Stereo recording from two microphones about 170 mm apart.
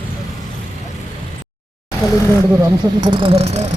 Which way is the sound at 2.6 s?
25° right (ahead or behind).